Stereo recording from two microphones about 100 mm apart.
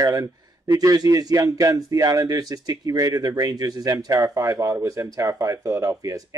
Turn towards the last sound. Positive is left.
turn(degrees=-35)  # may be behind; listen again after turning